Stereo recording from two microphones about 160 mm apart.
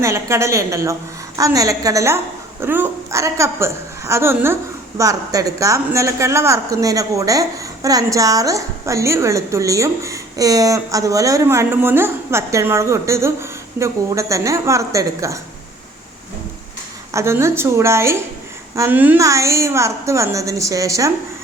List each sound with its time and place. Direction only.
0.0 s a woman's voice: 15° right (ahead or behind)
17.1 s a woman's voice: 15° right (ahead or behind)